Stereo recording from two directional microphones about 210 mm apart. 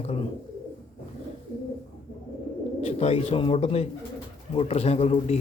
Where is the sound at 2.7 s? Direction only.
30° left (ahead or behind).